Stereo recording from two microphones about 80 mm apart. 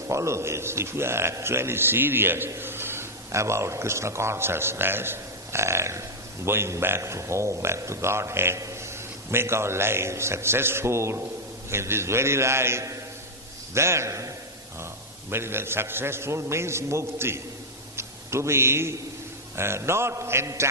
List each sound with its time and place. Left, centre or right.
0.1 s a man's voice: right
15.3 s a man's voice: right
17.9 s a sound: right
19.5 s a man's voice: right